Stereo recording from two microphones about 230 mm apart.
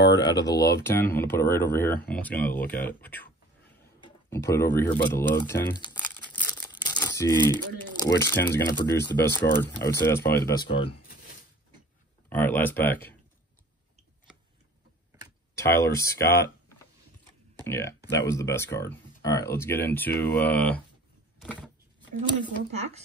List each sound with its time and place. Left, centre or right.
0.4 s speech: centre
5.9 s crumpling: centre
6.4 s speech: centre
10.6 s speech: left
12.3 s speech: centre
15.5 s speech: centre
21.4 s a sound: centre